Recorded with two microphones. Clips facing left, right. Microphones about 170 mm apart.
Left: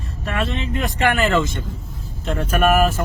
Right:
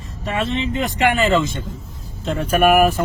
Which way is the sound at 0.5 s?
15° right (ahead or behind).